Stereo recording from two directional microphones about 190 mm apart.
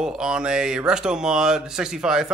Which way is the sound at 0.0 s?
5° right (ahead or behind).